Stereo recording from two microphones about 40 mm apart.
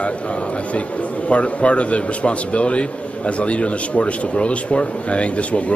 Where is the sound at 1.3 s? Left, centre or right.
Left.